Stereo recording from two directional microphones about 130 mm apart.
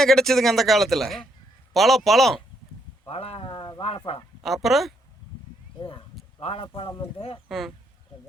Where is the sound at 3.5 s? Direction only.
35° left (ahead or behind).